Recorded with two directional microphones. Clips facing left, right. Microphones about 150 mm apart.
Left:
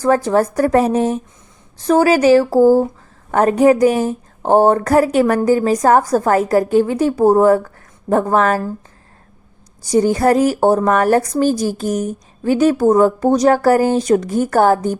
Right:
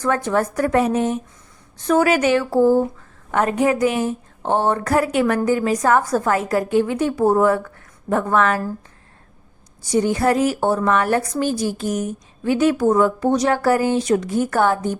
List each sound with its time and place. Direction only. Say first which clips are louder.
0.0 s speech: left 5 dB; 35° left (ahead or behind)
9.8 s speech: left 4 dB; 40° left (ahead or behind)